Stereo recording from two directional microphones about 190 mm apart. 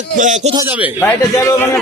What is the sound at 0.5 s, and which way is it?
Speech, 10° right (ahead or behind).